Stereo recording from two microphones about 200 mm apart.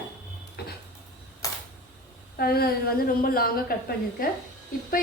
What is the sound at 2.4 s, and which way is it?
A woman's voice, 50° left (ahead or behind).